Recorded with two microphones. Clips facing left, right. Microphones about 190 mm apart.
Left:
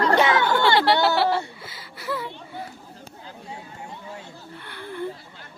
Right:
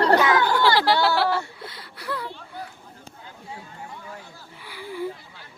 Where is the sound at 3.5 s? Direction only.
25° left (ahead or behind).